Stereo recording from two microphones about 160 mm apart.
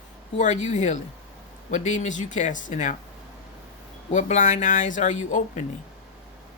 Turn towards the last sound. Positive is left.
turn(degrees=50)  # may be behind; listen again after turning